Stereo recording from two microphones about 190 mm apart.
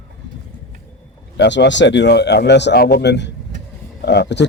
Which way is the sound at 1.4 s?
70° left (ahead or behind).